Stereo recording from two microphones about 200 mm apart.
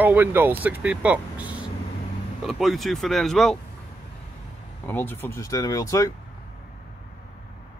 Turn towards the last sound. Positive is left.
turn(degrees=15)  # may be behind; listen again after turning